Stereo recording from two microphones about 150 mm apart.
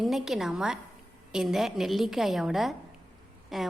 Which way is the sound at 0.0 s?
Centre (ahead or behind).